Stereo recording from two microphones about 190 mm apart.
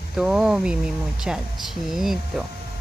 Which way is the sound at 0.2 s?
5° right (ahead or behind).